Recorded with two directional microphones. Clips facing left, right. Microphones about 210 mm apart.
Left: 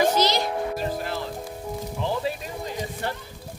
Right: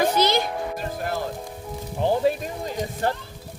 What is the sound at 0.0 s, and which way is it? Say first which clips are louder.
Music: right 1 dB; 55° right (ahead or behind).